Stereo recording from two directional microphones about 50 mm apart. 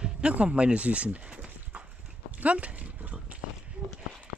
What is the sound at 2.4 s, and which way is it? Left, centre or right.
Dog, right.